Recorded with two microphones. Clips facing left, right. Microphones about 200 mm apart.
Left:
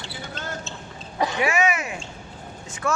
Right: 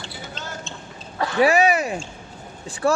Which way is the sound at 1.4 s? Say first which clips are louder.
Right 8 dB; 35° right (ahead or behind).